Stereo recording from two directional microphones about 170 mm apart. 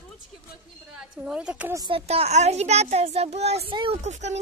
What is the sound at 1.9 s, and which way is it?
A child's voice, 35° right (ahead or behind).